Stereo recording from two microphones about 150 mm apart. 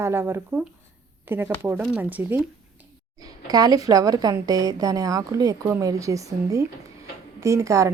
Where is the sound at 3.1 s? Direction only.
25° right (ahead or behind).